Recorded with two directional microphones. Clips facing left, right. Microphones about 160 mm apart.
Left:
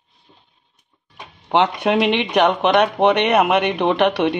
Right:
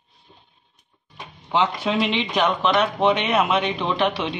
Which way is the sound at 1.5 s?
65° left (ahead or behind).